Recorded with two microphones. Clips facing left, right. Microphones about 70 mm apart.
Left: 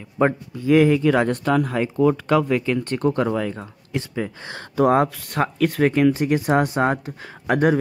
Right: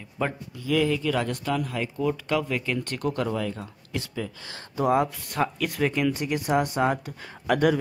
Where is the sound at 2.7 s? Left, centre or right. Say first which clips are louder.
Left 7 dB; left.